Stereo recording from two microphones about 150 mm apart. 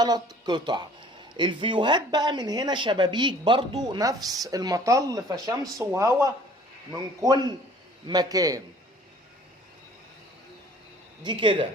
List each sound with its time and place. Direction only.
0.0 s speech: 25° right (ahead or behind)
11.2 s a woman's voice: 30° right (ahead or behind)